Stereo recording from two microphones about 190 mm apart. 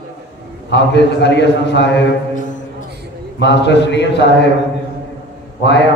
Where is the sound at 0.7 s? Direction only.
65° left (ahead or behind).